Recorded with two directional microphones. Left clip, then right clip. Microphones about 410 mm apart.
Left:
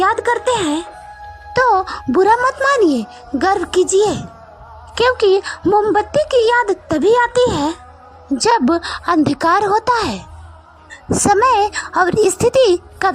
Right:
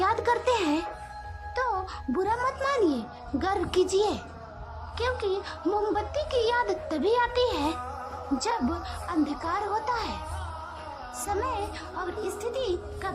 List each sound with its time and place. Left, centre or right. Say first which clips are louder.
0.0 s a sound: left 10 dB; centre
1.5 s a woman's voice: left 16 dB; centre
11.3 s a woman's voice: left 18 dB; left